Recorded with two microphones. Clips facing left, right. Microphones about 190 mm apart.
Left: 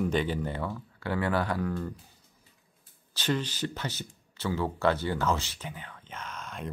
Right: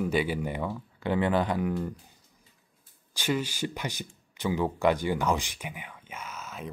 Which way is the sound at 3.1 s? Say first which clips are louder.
Right 1 dB; 10° right (ahead or behind).